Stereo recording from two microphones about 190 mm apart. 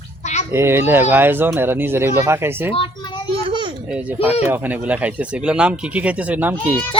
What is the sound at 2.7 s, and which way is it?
Children playing, 25° left (ahead or behind).